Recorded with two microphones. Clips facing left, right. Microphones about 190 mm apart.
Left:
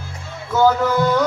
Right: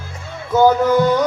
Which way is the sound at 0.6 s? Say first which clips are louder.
Right 3 dB; 15° right (ahead or behind).